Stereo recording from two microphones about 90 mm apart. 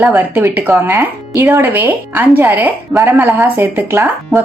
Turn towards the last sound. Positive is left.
turn(degrees=-25)  # may be behind; listen again after turning